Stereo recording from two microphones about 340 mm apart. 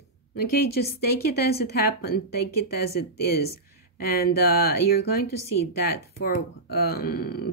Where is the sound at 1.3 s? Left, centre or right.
Left.